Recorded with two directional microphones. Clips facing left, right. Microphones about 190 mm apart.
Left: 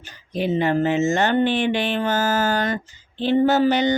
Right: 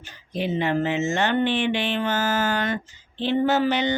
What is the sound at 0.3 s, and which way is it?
Speech, 45° left (ahead or behind).